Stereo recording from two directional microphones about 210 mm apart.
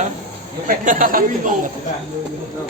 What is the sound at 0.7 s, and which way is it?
A man's voice, 40° right (ahead or behind).